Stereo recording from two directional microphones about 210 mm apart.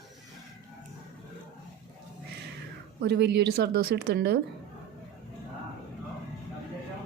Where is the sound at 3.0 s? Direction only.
50° right (ahead or behind).